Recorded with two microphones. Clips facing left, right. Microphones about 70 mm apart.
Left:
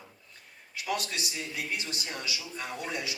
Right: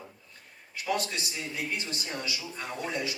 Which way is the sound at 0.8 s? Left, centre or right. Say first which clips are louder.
Right 2 dB; right.